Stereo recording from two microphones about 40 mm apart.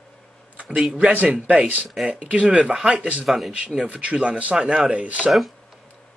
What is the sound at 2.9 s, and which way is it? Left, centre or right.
Speech, right.